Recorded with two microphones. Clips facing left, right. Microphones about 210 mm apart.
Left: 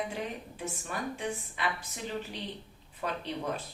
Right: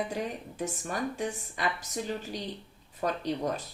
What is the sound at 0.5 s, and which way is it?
A woman's voice, 40° right (ahead or behind).